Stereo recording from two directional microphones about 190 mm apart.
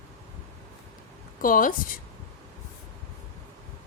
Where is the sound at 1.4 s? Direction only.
45° left (ahead or behind).